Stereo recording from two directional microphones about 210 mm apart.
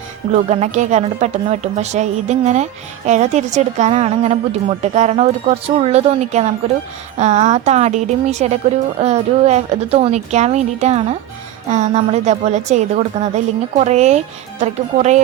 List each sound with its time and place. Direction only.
0.3 s a woman's voice: 35° right (ahead or behind)